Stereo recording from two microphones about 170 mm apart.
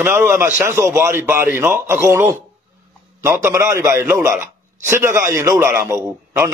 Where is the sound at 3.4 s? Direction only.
15° right (ahead or behind).